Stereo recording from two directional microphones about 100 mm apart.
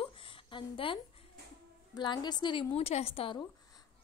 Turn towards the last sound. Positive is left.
turn(degrees=75)  # may be behind; listen again after turning